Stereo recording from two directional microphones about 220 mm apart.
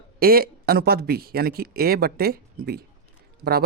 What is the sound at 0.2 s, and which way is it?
Speech, 45° right (ahead or behind).